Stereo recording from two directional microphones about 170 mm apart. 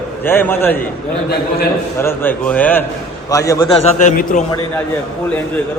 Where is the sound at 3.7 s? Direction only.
40° left (ahead or behind).